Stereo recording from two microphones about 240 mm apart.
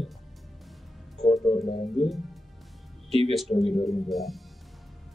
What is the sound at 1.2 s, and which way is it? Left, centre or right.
Music, left.